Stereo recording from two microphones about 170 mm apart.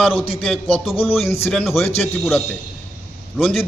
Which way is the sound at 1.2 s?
35° left (ahead or behind).